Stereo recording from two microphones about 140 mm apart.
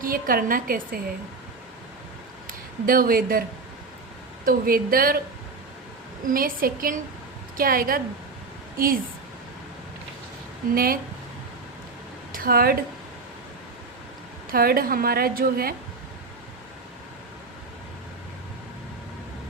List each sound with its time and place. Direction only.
0.0 s a woman's voice: 90° right
2.5 s speech: 90° right
4.4 s a woman's voice: 90° right
6.2 s a woman's voice: 90° right
10.7 s a woman's voice: 90° right
12.3 s speech: 90° right
14.5 s a woman's voice: 90° right